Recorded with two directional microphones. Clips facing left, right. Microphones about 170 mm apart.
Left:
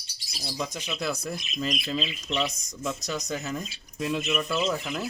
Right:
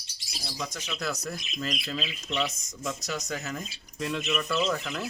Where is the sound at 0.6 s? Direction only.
15° left (ahead or behind).